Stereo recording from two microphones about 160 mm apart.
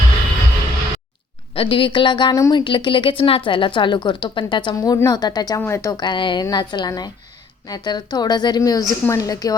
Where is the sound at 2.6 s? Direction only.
30° left (ahead or behind).